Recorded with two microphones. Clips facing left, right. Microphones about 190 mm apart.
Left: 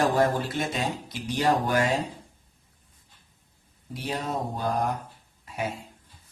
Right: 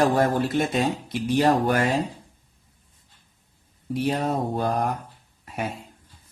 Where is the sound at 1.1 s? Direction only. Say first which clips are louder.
Right 4 dB; 55° right (ahead or behind).